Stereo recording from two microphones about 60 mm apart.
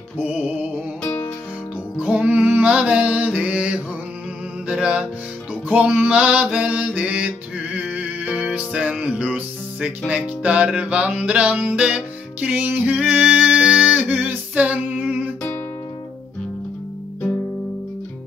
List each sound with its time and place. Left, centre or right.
0.2 s music: right
2.0 s music: right
14.5 s female singing: right